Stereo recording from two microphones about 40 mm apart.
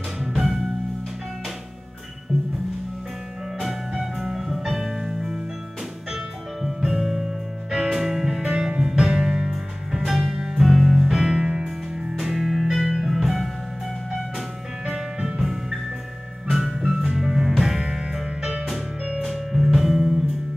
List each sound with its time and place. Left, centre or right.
3.5 s music: centre
10.7 s music: centre
11.1 s music: centre
12.2 s music: centre
14.9 s music: centre